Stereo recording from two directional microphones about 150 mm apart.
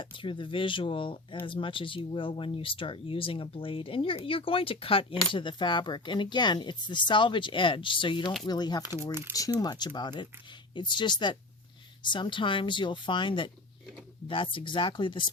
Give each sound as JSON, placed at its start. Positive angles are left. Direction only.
{"t": 0.0, "sound": "speech", "side_deg": 35}